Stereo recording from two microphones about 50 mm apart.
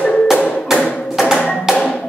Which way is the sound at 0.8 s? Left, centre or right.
Centre.